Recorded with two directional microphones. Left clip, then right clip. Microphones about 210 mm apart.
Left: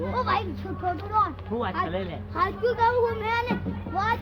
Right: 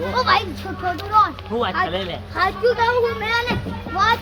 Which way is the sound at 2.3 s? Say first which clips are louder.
Right 7 dB; 35° left (ahead or behind).